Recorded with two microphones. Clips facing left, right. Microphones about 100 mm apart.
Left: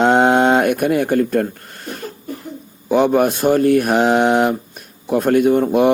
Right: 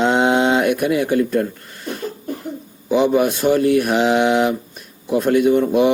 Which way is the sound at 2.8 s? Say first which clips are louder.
Left 1 dB; 50° left (ahead or behind).